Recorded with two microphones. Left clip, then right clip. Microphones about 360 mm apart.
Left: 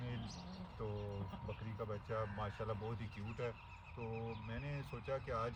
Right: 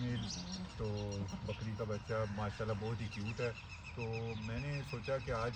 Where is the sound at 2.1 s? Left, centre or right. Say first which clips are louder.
Right 3 dB; centre.